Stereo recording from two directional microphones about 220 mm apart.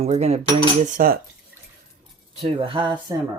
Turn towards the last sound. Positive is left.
turn(degrees=-20)  # may be behind; listen again after turning